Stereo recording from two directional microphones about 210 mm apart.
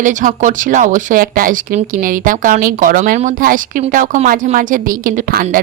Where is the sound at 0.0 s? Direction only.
35° right (ahead or behind).